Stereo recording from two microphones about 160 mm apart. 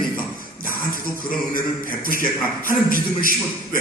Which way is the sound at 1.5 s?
60° left (ahead or behind).